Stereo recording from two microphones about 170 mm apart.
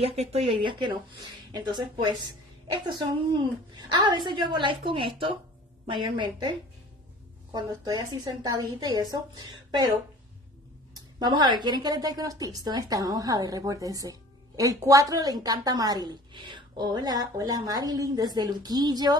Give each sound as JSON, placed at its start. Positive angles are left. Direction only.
{"t": 0.0, "sound": "speech", "side_deg": -35}
{"t": 7.5, "sound": "speech", "side_deg": -25}
{"t": 11.0, "sound": "speech", "side_deg": -25}